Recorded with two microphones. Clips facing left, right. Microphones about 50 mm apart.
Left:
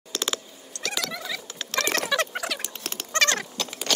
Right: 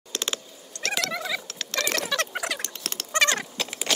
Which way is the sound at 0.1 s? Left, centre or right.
Centre.